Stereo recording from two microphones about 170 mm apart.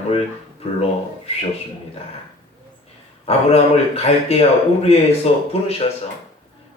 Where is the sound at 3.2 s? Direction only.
35° left (ahead or behind).